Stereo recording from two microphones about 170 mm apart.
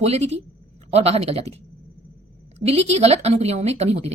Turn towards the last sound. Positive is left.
turn(degrees=-40)  # may be behind; listen again after turning